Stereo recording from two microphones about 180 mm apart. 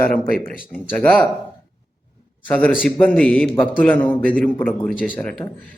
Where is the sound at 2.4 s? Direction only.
10° left (ahead or behind).